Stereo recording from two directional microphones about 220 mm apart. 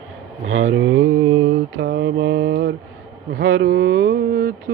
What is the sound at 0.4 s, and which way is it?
Mantra, 65° right (ahead or behind).